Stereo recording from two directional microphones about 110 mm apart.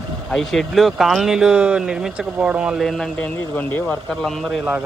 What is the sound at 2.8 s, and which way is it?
Speech, centre (ahead or behind).